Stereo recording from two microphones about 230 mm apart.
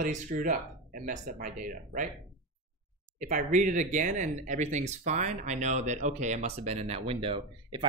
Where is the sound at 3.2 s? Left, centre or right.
Right.